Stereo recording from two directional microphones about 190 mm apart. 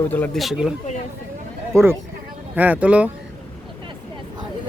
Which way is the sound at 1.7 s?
15° right (ahead or behind).